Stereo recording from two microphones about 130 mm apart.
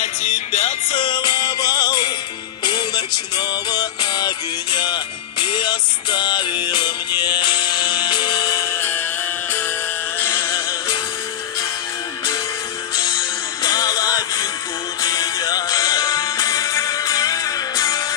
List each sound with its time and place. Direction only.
0.0 s music: 80° left
0.9 s music: 35° left (ahead or behind); by 9.0 s 20° left (ahead or behind)
10.2 s music: 20° left (ahead or behind)
13.1 s music: 25° left (ahead or behind)